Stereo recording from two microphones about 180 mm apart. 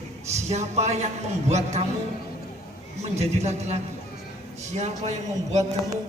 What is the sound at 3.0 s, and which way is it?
A man's voice, 35° right (ahead or behind).